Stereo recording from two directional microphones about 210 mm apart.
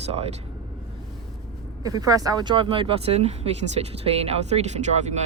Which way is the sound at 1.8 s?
15° right (ahead or behind).